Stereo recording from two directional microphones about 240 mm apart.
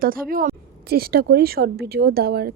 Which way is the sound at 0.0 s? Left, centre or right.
Right.